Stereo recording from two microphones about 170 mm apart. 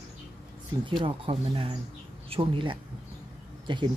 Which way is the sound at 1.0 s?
30° right (ahead or behind).